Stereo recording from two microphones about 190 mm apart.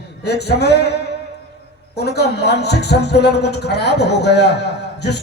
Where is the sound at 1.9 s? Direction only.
60° left (ahead or behind).